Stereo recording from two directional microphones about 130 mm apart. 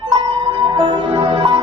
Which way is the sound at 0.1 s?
35° right (ahead or behind).